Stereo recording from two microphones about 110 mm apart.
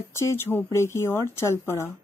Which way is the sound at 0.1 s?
25° left (ahead or behind).